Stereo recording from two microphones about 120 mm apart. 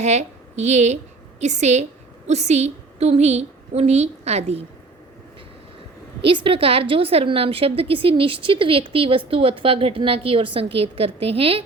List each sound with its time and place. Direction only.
0.0 s a woman's voice: 70° right (ahead or behind)
6.2 s a woman's voice: 45° right (ahead or behind)